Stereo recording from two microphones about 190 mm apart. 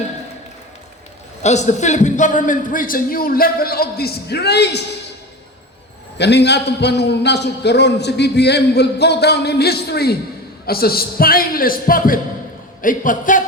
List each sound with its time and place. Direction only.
1.4 s a man's voice: 35° left (ahead or behind); by 4.8 s 60° left (ahead or behind)
6.1 s a man's voice: 65° left (ahead or behind); by 13.4 s 45° left (ahead or behind)